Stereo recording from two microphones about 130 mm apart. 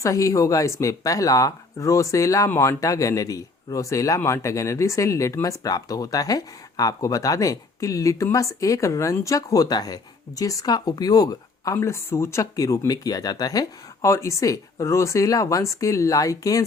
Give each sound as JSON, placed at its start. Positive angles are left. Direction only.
{"t": 0.0, "sound": "speech", "side_deg": 25}